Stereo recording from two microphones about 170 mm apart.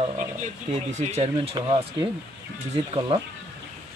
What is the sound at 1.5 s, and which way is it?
Speech, 25° right (ahead or behind).